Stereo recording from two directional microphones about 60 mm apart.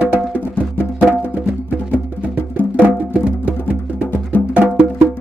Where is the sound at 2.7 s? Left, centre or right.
Right.